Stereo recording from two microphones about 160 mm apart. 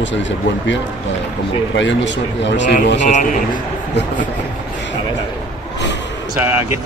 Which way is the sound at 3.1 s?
50° left (ahead or behind).